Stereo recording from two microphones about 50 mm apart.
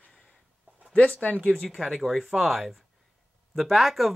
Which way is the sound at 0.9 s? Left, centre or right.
Left.